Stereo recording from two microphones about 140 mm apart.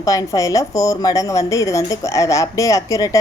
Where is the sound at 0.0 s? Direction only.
25° left (ahead or behind).